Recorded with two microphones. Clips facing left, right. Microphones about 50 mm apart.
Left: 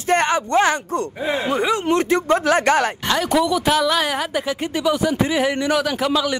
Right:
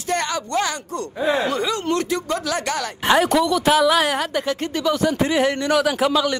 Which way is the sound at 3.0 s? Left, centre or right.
Centre.